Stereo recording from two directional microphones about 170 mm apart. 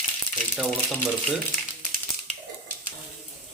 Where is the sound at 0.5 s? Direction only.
Centre (ahead or behind).